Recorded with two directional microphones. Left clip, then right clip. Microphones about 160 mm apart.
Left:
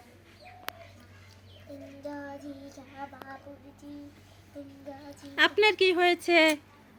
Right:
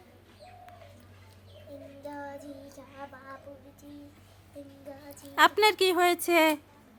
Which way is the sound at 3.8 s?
10° right (ahead or behind).